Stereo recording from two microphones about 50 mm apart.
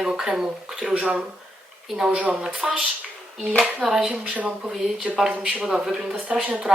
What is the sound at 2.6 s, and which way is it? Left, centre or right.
Speech, centre.